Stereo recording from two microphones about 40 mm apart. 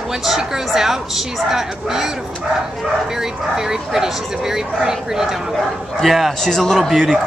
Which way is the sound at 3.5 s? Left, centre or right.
Centre.